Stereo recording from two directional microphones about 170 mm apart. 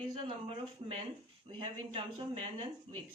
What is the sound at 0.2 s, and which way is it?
Speech, 30° right (ahead or behind).